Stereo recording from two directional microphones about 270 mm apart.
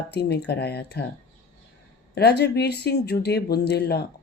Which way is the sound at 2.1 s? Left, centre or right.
Left.